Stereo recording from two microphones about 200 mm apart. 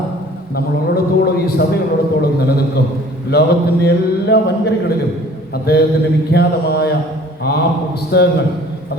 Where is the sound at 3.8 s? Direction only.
55° left (ahead or behind).